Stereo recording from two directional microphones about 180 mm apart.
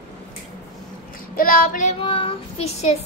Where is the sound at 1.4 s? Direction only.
50° left (ahead or behind).